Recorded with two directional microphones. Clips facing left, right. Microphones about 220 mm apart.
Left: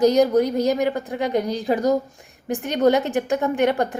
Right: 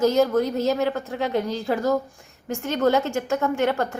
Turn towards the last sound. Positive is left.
turn(degrees=15)  # may be behind; listen again after turning